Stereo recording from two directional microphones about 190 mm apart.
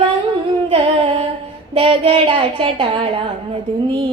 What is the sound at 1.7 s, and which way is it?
A woman's voice, 30° right (ahead or behind).